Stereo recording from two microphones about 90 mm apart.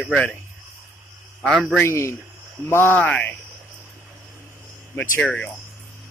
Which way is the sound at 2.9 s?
10° left (ahead or behind).